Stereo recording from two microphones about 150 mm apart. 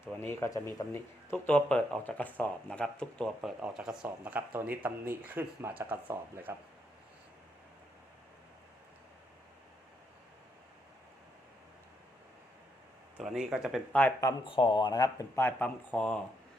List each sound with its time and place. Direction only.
0.0 s speech: 15° left (ahead or behind); by 6.6 s 15° right (ahead or behind)
13.1 s speech: 5° right (ahead or behind)
14.4 s speech: 35° left (ahead or behind); by 16.2 s 5° left (ahead or behind)